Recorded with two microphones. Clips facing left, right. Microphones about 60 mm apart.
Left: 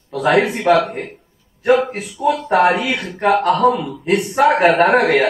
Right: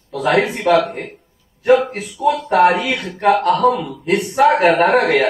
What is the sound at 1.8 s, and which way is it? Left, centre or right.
Speech, centre.